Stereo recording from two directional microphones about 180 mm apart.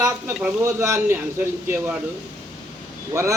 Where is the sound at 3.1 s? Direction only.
15° right (ahead or behind).